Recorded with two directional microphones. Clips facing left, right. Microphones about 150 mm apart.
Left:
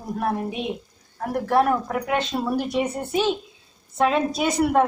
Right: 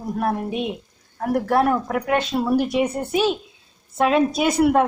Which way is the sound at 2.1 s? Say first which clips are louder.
Right 4 dB; 5° right (ahead or behind).